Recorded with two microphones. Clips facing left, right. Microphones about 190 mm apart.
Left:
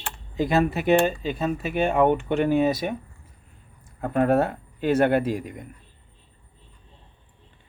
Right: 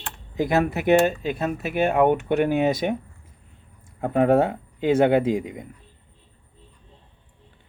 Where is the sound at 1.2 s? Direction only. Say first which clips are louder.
Even; 5° right (ahead or behind).